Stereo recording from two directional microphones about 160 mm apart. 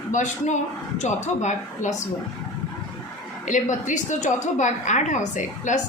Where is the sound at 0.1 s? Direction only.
50° left (ahead or behind).